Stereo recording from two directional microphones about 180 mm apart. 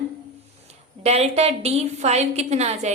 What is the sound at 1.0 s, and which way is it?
A woman's voice, 35° right (ahead or behind).